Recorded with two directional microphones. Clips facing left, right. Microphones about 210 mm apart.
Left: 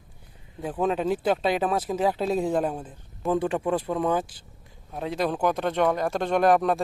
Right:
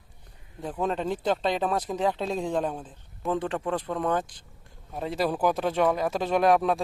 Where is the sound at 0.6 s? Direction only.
5° left (ahead or behind).